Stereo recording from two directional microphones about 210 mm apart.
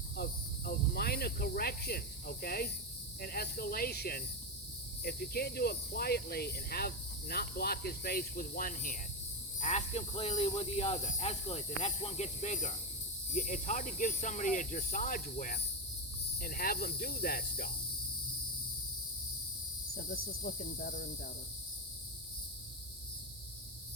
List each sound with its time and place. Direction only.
0.2 s cricket: 45° left (ahead or behind)
3.2 s speech: 45° left (ahead or behind)
20.0 s speech: 45° left (ahead or behind)